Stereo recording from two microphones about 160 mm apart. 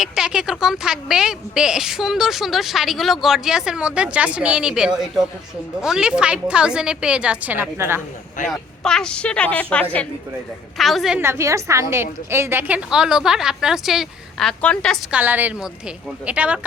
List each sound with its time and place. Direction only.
0.0 s a woman's voice: 5° right (ahead or behind)
8.4 s speech: 50° left (ahead or behind)
8.8 s a woman's voice: 5° left (ahead or behind)
11.2 s a woman's voice: 15° right (ahead or behind); by 14.9 s 5° left (ahead or behind)
15.1 s a woman's voice: 10° right (ahead or behind)